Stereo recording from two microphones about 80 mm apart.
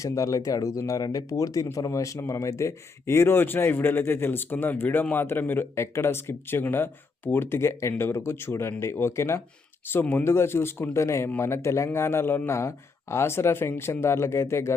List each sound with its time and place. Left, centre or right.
0.0 s speech: left